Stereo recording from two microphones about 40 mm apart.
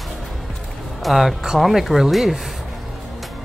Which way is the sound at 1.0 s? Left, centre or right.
Centre.